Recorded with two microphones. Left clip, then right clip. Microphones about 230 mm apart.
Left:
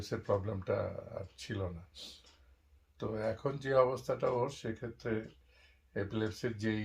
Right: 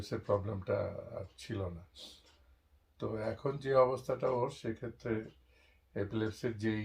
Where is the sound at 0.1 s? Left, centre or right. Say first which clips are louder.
Even; centre.